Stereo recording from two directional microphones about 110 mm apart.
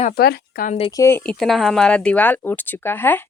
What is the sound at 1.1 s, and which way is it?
Speech, 10° left (ahead or behind).